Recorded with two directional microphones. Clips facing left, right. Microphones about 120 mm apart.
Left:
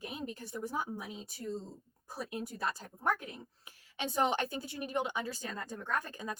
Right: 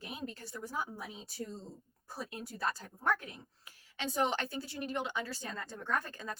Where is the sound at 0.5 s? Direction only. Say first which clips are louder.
Left 3 dB; 20° left (ahead or behind).